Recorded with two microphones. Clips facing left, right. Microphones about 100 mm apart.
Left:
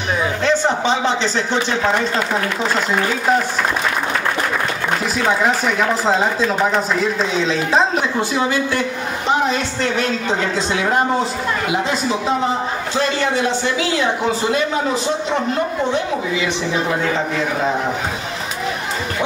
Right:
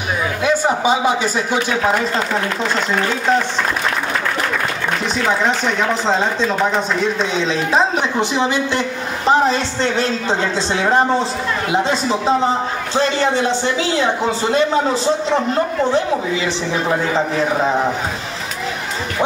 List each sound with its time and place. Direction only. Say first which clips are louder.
0.4 s speech: right 2 dB; 10° right (ahead or behind)
2.3 s speech: even; 5° left (ahead or behind)
5.2 s speech: even; 5° left (ahead or behind)
8.2 s a man's voice: right 2 dB; 20° right (ahead or behind)
9.3 s a woman's voice: right 4 dB; 35° right (ahead or behind)